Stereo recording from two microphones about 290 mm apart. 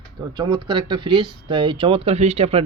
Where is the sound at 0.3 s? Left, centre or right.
Centre.